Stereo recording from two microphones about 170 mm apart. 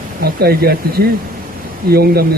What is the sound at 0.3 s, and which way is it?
A man's voice, 65° right (ahead or behind).